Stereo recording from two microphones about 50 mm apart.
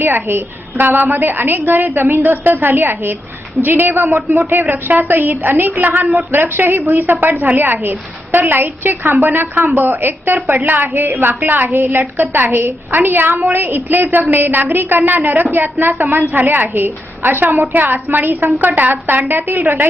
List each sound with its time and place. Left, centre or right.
0.0 s a woman's voice: right